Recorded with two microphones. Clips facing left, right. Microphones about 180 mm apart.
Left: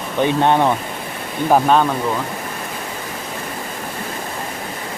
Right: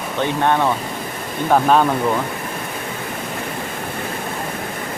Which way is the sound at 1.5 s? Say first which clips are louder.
Even; centre (ahead or behind).